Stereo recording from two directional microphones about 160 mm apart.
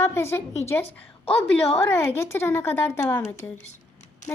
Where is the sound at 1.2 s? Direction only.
40° left (ahead or behind).